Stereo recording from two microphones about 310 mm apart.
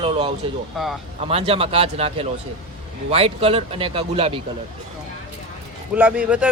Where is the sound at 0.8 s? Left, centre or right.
Centre.